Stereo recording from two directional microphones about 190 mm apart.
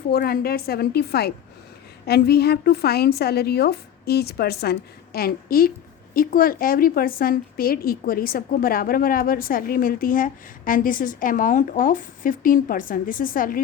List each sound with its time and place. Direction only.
0.1 s a woman's voice: 55° left (ahead or behind)